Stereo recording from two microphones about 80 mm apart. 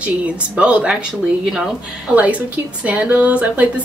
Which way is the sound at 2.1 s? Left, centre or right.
Centre.